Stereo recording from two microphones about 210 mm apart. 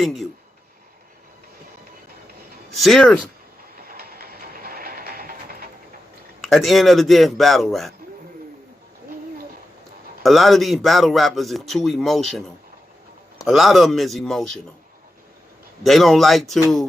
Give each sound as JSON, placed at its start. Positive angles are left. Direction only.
{"t": 0.0, "sound": "a man's voice", "side_deg": 0}
{"t": 2.6, "sound": "speech", "side_deg": 0}
{"t": 3.8, "sound": "music", "side_deg": -45}
{"t": 6.4, "sound": "a man's voice", "side_deg": 0}
{"t": 10.2, "sound": "a man's voice", "side_deg": 0}
{"t": 15.8, "sound": "a man's voice", "side_deg": 0}